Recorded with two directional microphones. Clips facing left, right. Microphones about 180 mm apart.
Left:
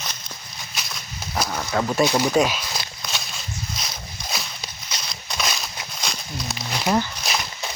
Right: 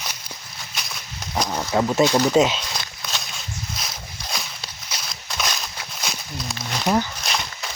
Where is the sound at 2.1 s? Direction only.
10° left (ahead or behind).